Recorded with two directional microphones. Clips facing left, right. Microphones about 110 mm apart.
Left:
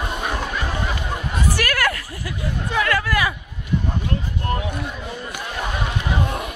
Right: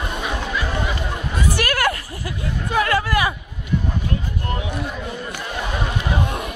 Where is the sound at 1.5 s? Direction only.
25° right (ahead or behind).